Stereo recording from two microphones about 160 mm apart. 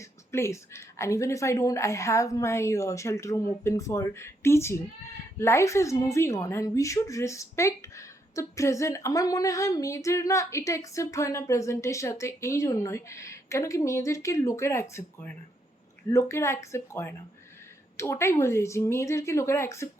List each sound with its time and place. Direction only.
0.0 s a woman's voice: 15° left (ahead or behind)